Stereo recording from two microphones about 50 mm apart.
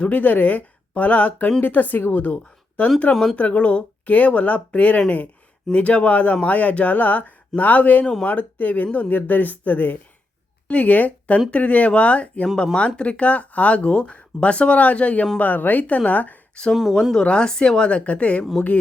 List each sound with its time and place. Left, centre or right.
0.0 s speech: left
16.9 s speech: centre; by 18.4 s left